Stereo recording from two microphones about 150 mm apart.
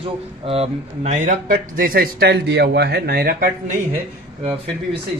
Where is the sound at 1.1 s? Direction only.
55° right (ahead or behind).